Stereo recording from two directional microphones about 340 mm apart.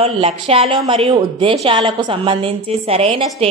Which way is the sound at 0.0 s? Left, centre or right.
Centre.